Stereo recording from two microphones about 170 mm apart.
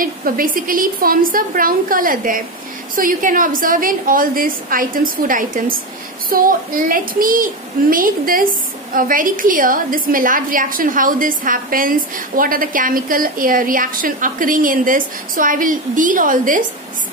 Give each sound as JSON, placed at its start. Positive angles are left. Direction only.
{"t": 0.0, "sound": "a woman's voice", "side_deg": -55}